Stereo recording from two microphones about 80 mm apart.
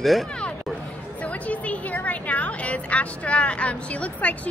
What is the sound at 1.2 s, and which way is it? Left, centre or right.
A woman's voice, centre.